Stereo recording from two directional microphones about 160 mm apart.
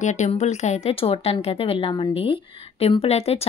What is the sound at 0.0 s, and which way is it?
Speech, 45° left (ahead or behind).